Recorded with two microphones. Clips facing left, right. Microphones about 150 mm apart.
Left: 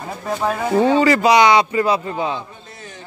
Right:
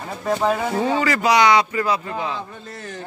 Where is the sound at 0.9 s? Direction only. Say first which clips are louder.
Left 3 dB; 25° left (ahead or behind).